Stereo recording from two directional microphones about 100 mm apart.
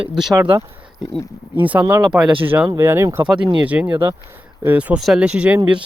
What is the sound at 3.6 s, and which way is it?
Speech, 15° right (ahead or behind).